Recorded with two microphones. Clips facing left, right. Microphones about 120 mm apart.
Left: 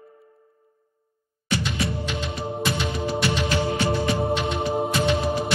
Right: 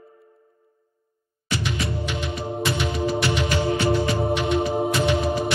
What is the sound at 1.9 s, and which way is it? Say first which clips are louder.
Music: right 1 dB; 25° left (ahead or behind).